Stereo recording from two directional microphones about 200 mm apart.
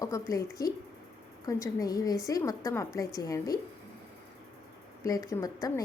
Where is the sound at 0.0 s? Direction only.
15° left (ahead or behind).